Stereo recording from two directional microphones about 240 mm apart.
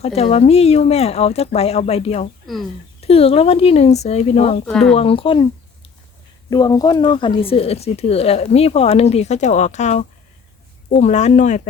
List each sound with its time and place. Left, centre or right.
0.0 s speech: left
6.5 s speech: centre; by 11.6 s left